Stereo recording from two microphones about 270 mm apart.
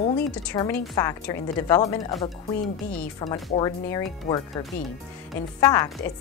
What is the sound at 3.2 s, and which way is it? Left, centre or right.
Speech, centre.